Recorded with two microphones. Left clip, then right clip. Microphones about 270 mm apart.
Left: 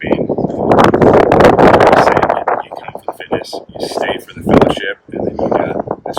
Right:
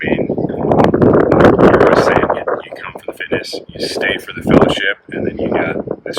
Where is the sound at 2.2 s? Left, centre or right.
Left.